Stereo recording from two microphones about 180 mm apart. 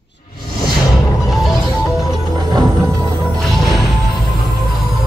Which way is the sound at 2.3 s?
20° right (ahead or behind).